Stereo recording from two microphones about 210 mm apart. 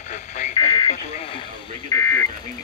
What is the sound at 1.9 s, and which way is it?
Buzzer, 15° left (ahead or behind).